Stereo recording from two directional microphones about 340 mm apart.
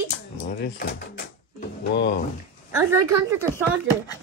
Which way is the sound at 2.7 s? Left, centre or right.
Centre.